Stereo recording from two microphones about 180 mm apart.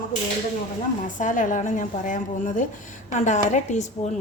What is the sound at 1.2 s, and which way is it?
A woman's voice, 45° left (ahead or behind).